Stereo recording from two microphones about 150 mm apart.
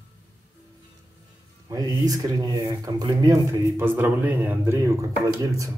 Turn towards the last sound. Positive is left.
turn(degrees=-20)  # may be behind; listen again after turning